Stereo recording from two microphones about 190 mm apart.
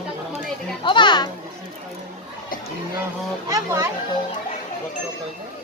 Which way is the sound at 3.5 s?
15° right (ahead or behind).